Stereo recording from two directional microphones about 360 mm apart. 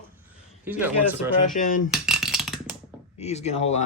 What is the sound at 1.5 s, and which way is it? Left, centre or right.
Speech, left.